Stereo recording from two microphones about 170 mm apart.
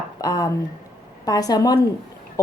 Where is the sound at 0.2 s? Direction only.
20° left (ahead or behind).